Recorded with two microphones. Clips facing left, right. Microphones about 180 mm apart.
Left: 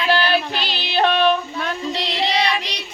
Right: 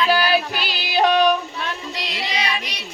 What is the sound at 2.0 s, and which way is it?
Child singing, 30° left (ahead or behind).